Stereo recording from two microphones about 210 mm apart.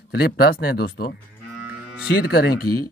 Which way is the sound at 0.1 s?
50° left (ahead or behind).